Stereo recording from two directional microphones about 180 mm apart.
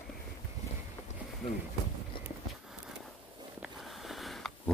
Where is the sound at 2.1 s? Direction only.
30° left (ahead or behind).